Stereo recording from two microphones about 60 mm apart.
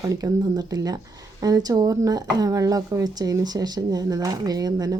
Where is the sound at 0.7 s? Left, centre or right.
Right.